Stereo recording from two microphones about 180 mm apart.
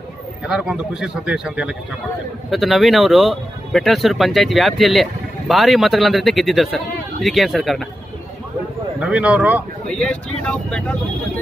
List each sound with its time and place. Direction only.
0.5 s speech: 5° right (ahead or behind)
9.0 s speech: 5° right (ahead or behind)
9.8 s speech: 5° left (ahead or behind)